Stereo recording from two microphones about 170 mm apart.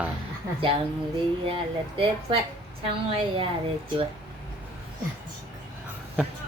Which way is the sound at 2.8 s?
30° right (ahead or behind).